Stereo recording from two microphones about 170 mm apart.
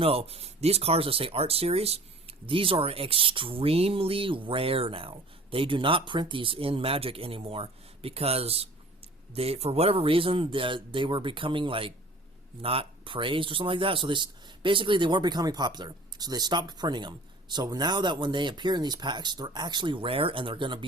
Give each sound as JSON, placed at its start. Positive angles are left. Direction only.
{"t": 0.0, "sound": "speech", "side_deg": -35}